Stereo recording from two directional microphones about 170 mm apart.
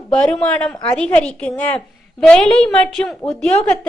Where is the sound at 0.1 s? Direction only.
5° left (ahead or behind).